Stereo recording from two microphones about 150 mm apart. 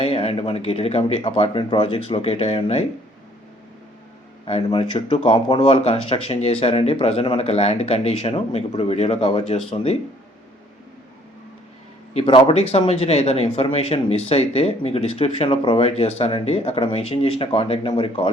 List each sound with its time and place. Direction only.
0.0 s a man's voice: 40° left (ahead or behind)
4.4 s a man's voice: 40° left (ahead or behind)
12.1 s a man's voice: 35° left (ahead or behind)